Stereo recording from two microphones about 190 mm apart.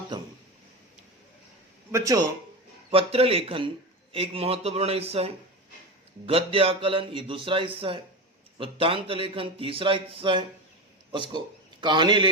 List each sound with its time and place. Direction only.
1.9 s speech: 15° right (ahead or behind)
2.9 s speech: 30° right (ahead or behind)